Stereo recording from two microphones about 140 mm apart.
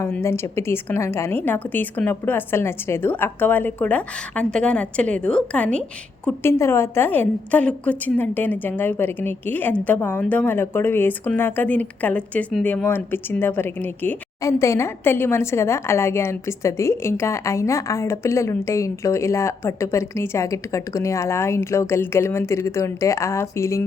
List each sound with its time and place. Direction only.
0.0 s a woman's voice: 20° left (ahead or behind)